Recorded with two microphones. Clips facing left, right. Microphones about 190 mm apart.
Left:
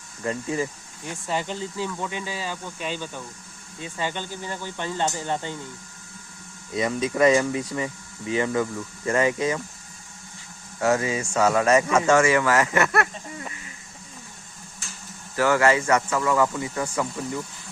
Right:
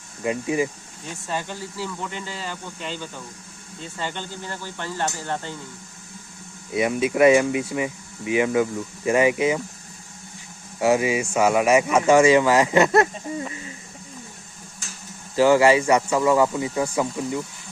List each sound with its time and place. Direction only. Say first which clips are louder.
0.2 s speech: right 3 dB; 15° right (ahead or behind)
1.0 s speech: left 1 dB; 15° left (ahead or behind)
6.7 s speech: right 3 dB; 10° right (ahead or behind)
10.8 s speech: right 3 dB; 15° right (ahead or behind)
13.3 s a sound: right 9 dB; 25° right (ahead or behind)
15.4 s speech: right 4 dB; 15° right (ahead or behind)